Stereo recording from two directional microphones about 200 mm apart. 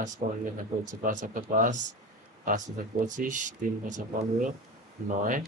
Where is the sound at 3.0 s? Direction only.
40° right (ahead or behind).